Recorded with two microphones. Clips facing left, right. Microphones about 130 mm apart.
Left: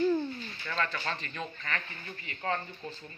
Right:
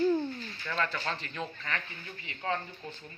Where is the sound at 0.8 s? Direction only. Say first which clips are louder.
Even; 10° right (ahead or behind).